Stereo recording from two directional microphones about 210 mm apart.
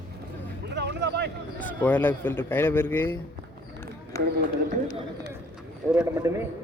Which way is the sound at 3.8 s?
15° left (ahead or behind).